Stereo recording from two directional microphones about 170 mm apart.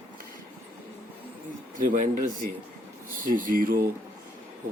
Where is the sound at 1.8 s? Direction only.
50° right (ahead or behind).